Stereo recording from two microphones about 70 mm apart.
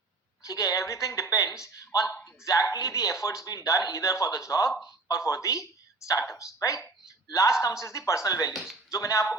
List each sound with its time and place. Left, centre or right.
0.4 s a man's voice: left